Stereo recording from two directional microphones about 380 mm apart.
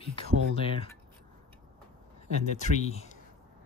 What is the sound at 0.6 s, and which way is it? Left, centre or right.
Speech, centre.